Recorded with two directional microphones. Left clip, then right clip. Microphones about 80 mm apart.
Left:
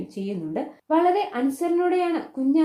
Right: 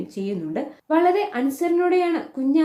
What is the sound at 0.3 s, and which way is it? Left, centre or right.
Speech, left.